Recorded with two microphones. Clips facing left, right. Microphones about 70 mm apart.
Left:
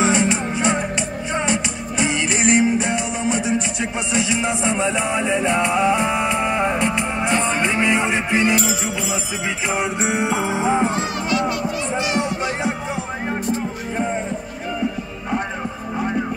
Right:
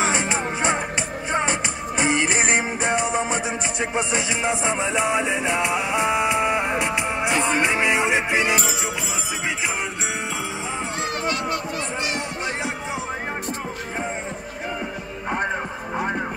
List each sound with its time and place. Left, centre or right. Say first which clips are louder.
0.0 s music: left 4 dB; right; by 8.7 s centre
9.8 s music: left 7 dB; centre
11.2 s a sound: left 6 dB; right